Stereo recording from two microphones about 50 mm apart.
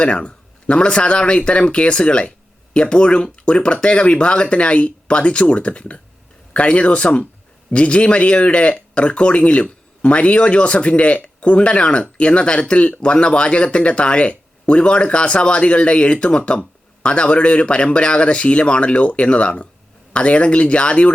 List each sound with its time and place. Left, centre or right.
0.0 s speech: centre